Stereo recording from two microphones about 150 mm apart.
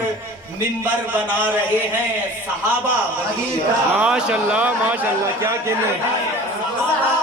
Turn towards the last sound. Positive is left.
turn(degrees=-20)  # may be behind; listen again after turning